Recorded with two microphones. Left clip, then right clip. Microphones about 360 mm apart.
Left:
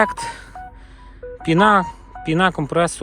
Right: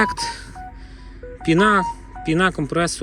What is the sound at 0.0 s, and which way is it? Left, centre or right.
Speech, centre.